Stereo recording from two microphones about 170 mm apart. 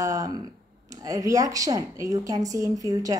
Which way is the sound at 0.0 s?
20° right (ahead or behind).